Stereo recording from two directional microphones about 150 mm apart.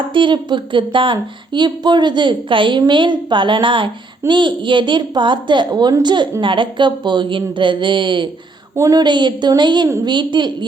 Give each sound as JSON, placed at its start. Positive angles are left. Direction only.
{"t": 0.1, "sound": "speech", "side_deg": -35}
{"t": 8.7, "sound": "a woman's voice", "side_deg": -20}